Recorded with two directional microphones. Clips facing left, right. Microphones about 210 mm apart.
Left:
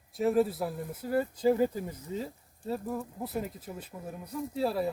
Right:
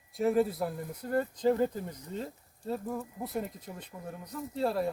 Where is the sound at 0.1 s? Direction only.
Centre (ahead or behind).